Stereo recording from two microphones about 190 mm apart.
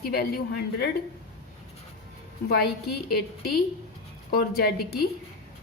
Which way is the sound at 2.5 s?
55° left (ahead or behind).